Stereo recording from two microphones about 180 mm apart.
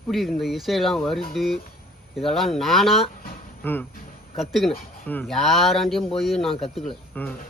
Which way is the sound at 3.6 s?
10° left (ahead or behind).